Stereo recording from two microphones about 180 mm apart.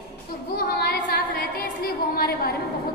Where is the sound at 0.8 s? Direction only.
60° left (ahead or behind).